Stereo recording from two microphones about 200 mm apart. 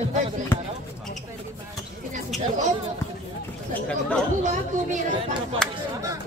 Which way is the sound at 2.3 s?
35° right (ahead or behind).